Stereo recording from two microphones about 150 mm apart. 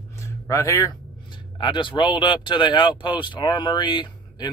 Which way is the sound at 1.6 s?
35° left (ahead or behind).